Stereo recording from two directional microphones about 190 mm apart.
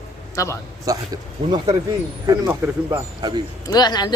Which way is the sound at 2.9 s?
20° right (ahead or behind).